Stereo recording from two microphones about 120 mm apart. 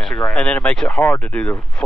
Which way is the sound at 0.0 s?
5° left (ahead or behind).